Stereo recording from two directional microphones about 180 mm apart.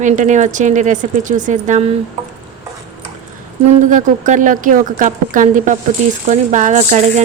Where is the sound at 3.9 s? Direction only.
45° right (ahead or behind).